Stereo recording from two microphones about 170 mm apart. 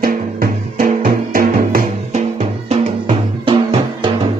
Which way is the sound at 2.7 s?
35° right (ahead or behind).